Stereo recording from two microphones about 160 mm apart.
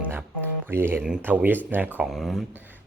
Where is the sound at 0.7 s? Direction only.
15° right (ahead or behind).